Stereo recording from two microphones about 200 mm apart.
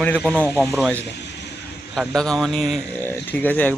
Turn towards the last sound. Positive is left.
turn(degrees=10)  # may be behind; listen again after turning